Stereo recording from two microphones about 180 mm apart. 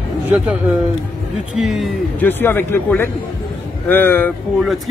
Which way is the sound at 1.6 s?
Centre (ahead or behind).